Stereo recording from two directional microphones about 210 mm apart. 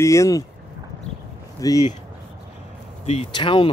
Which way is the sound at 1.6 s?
15° left (ahead or behind).